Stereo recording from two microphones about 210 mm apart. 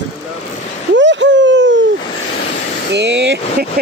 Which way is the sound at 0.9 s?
60° right (ahead or behind).